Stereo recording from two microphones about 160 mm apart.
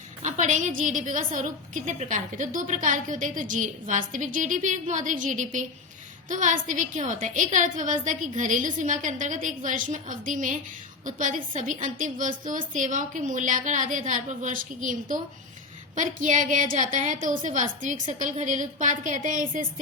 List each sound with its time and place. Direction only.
0.2 s a woman's voice: 50° right (ahead or behind)